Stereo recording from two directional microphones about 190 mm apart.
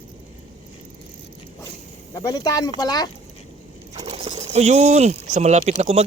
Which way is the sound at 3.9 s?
30° right (ahead or behind).